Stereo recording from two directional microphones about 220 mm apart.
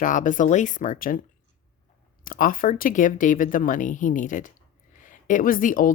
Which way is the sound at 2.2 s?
40° left (ahead or behind).